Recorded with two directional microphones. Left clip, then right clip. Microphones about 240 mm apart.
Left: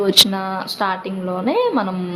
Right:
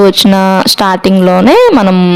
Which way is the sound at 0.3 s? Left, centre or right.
Right.